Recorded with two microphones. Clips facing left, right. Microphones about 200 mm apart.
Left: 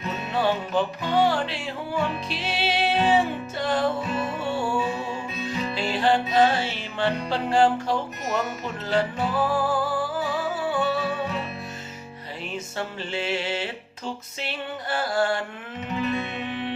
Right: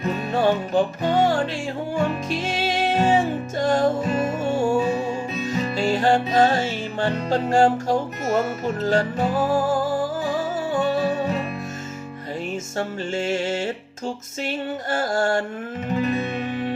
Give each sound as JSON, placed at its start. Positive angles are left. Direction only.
{"t": 0.0, "sound": "music", "side_deg": -45}
{"t": 12.7, "sound": "music", "side_deg": -45}